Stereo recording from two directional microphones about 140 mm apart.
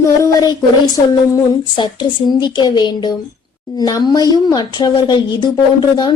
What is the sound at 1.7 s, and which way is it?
Speech, 30° left (ahead or behind).